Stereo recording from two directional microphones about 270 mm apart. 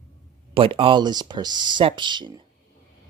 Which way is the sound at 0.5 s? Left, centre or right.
Centre.